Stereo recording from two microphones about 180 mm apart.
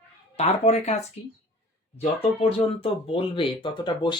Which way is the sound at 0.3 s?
35° left (ahead or behind).